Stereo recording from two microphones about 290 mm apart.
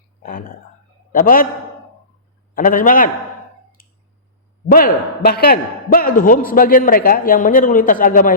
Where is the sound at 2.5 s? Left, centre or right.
Left.